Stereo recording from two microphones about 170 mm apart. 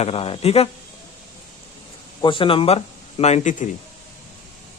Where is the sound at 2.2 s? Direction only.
30° left (ahead or behind).